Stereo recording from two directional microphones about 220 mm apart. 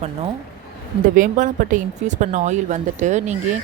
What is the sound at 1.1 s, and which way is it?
A woman's voice, 35° right (ahead or behind).